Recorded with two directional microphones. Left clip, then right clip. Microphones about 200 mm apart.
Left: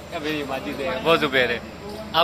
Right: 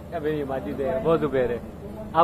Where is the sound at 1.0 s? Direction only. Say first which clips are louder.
Left 5 dB; centre (ahead or behind).